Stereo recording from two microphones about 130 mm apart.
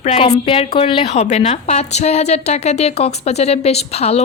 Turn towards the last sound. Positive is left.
turn(degrees=55)  # may be behind; listen again after turning